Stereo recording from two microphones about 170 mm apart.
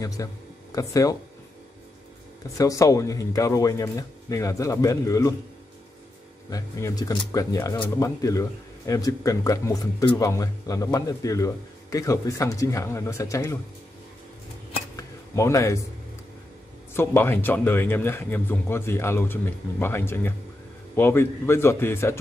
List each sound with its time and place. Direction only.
0.0 s speech: 20° left (ahead or behind)
2.5 s speech: 20° left (ahead or behind)
6.5 s speech: 20° left (ahead or behind)
15.0 s a sound: 20° left (ahead or behind)
16.9 s a man's voice: 15° left (ahead or behind)